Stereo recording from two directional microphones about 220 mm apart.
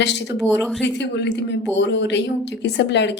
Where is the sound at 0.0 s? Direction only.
55° left (ahead or behind).